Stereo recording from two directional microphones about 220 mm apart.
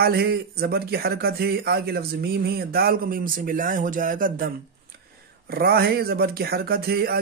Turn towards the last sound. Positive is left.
turn(degrees=-45)  # may be behind; listen again after turning